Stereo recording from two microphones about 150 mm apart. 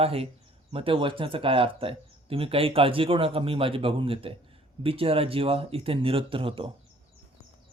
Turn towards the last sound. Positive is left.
turn(degrees=-35)  # may be behind; listen again after turning